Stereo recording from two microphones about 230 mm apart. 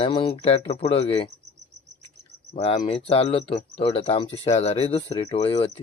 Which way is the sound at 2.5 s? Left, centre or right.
Left.